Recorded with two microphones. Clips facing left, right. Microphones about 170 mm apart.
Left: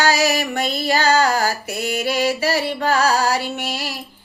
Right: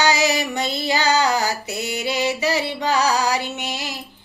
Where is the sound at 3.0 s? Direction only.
15° right (ahead or behind).